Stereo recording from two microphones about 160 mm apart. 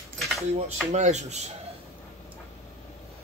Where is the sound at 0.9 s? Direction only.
45° right (ahead or behind).